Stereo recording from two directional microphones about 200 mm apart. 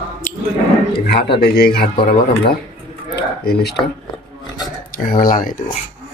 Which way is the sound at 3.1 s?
55° left (ahead or behind).